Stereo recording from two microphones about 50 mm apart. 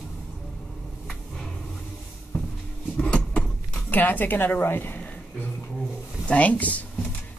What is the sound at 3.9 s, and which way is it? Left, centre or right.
A woman's voice, left.